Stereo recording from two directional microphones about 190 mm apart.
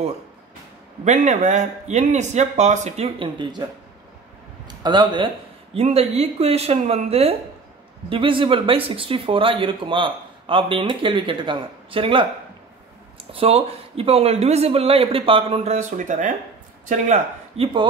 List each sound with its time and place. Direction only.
1.0 s speech: 40° right (ahead or behind)
4.6 s a man's voice: 25° right (ahead or behind); by 17.6 s 40° right (ahead or behind)